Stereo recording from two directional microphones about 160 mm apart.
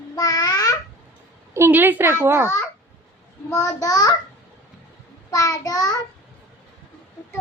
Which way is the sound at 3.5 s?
20° left (ahead or behind).